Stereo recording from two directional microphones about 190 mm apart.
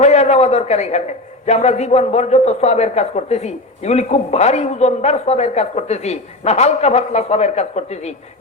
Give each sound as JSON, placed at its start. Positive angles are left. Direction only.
{"t": 0.0, "sound": "a man's voice", "side_deg": 35}